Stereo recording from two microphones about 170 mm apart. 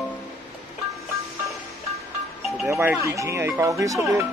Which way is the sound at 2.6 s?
15° right (ahead or behind).